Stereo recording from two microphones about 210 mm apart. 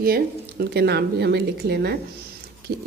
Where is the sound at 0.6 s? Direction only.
50° right (ahead or behind).